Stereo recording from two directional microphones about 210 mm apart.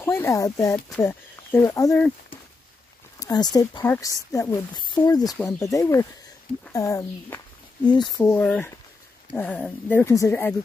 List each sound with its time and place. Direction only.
0.0 s speech: 10° left (ahead or behind)
3.2 s speech: 20° left (ahead or behind)